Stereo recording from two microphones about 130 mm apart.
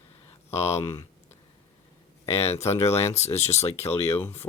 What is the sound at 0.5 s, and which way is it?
Speech, 55° left (ahead or behind).